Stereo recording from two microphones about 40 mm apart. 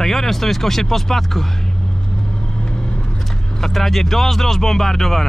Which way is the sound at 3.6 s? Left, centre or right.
Centre.